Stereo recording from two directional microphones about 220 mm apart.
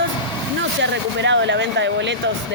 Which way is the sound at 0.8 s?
55° right (ahead or behind).